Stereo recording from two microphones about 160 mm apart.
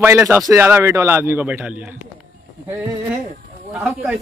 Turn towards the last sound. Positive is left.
turn(degrees=-5)  # may be behind; listen again after turning